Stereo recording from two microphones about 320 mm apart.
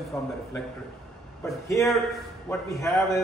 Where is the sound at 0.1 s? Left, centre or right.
Centre.